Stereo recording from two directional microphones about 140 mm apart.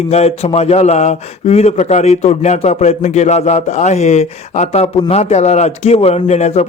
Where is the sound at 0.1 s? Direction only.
50° left (ahead or behind).